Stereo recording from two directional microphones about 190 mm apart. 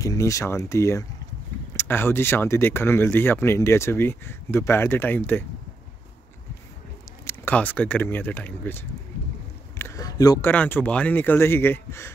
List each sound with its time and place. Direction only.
0.0 s speech: 15° left (ahead or behind)
7.2 s speech: 10° left (ahead or behind)
9.8 s a sound: 15° left (ahead or behind)
10.5 s speech: 10° left (ahead or behind)